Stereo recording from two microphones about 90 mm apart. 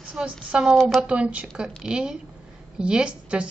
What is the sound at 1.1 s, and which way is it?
A woman's voice, 10° right (ahead or behind).